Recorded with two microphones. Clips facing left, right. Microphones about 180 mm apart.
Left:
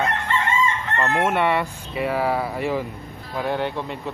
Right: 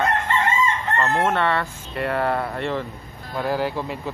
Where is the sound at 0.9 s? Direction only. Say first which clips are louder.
Left 1 dB; 15° left (ahead or behind).